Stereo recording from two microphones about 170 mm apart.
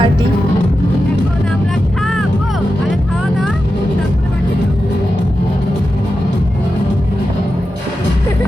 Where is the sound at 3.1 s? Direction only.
Centre (ahead or behind).